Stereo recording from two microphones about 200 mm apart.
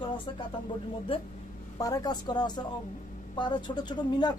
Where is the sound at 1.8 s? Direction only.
20° left (ahead or behind).